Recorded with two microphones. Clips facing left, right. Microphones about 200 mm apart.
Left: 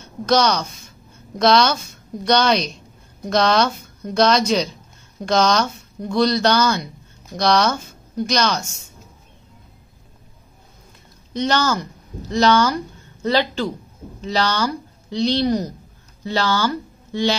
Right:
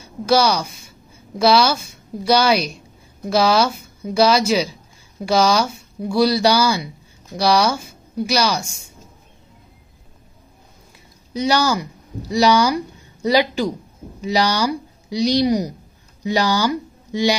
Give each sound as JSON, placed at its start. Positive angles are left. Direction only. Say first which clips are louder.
{"t": 0.0, "sound": "a woman's voice", "louder": "right 1 dB", "side_deg": -10}
{"t": 11.3, "sound": "speech", "louder": "right 1 dB", "side_deg": -10}